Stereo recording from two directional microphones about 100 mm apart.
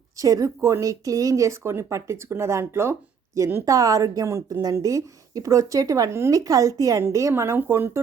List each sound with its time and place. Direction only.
0.2 s speech: 35° right (ahead or behind)